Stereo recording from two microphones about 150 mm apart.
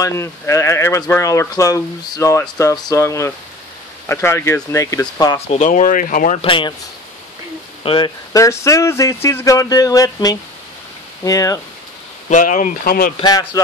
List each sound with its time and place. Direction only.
0.0 s speech: 20° left (ahead or behind)
5.5 s speech: 55° left (ahead or behind)
6.4 s speech: 35° left (ahead or behind)
7.8 s speech: 35° left (ahead or behind)
12.3 s speech: 60° left (ahead or behind)
13.2 s speech: 30° left (ahead or behind)